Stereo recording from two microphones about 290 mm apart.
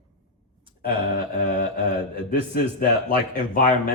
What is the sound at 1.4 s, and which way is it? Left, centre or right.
Speech, left.